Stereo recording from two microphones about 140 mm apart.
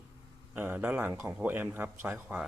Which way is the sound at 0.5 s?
15° right (ahead or behind).